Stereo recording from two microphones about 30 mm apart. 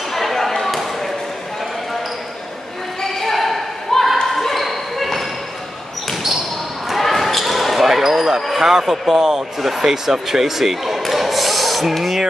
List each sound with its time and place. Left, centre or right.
0.1 s basketball bounce: centre
3.2 s basketball bounce: centre
4.3 s ping: centre
7.0 s basketball bounce: centre
8.5 s speech: centre